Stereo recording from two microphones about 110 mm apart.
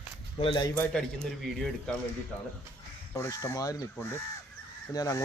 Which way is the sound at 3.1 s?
25° left (ahead or behind).